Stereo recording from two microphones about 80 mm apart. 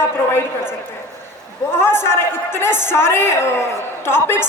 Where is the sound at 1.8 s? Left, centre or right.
Left.